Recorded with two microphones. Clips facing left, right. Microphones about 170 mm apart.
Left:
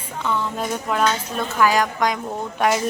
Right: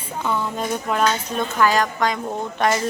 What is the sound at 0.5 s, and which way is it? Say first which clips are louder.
A woman's voice: even; centre (ahead or behind).